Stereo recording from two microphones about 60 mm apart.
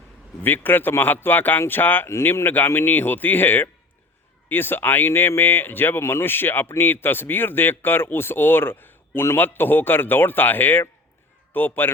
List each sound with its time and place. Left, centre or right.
0.4 s speech: left
2.0 s speech: left